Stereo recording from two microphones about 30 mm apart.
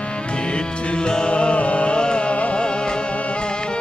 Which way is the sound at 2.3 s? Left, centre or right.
Left.